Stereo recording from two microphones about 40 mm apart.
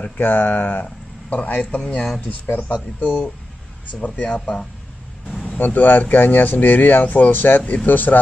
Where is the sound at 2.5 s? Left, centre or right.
Left.